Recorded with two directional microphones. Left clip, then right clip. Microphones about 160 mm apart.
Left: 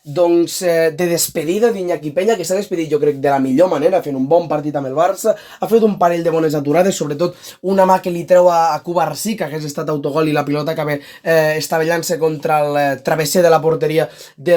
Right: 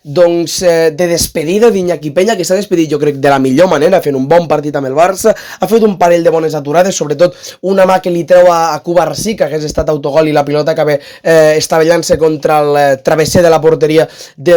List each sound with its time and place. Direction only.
0.3 s speech: 40° right (ahead or behind)